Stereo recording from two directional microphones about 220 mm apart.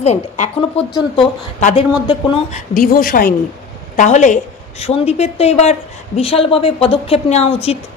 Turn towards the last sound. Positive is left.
turn(degrees=25)  # may be behind; listen again after turning